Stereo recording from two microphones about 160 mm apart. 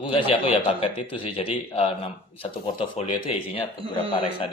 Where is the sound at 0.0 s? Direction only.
35° left (ahead or behind).